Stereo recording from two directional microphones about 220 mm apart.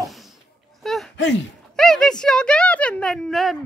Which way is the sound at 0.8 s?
Centre (ahead or behind).